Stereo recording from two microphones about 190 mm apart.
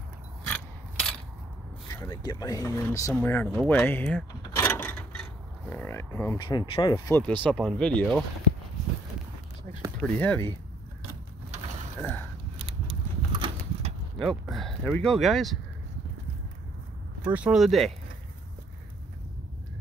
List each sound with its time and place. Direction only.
1.9 s speech: 20° left (ahead or behind)
7.1 s speech: 10° left (ahead or behind)
9.7 s a sound: 35° right (ahead or behind)
10.0 s speech: 10° left (ahead or behind)
12.0 s speech: 10° left (ahead or behind)
12.5 s a sound: 25° right (ahead or behind)
14.1 s speech: centre (ahead or behind)
17.3 s speech: 5° right (ahead or behind)